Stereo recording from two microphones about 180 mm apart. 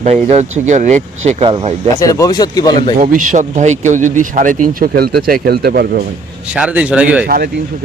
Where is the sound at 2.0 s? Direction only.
20° left (ahead or behind).